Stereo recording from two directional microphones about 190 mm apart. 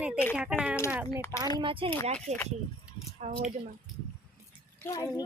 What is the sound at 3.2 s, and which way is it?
Speech, 35° right (ahead or behind).